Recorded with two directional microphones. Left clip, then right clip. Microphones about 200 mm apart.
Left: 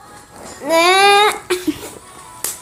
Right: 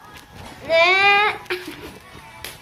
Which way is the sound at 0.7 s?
55° left (ahead or behind).